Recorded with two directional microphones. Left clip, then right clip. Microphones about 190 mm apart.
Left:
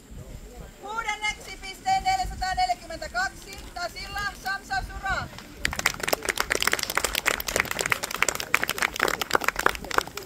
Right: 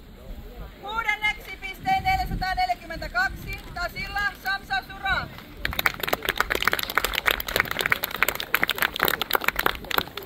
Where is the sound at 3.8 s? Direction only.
5° left (ahead or behind).